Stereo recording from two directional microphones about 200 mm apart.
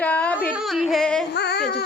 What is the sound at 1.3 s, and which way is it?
Music, 55° left (ahead or behind).